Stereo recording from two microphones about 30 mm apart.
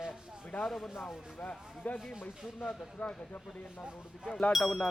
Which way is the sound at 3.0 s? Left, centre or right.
Left.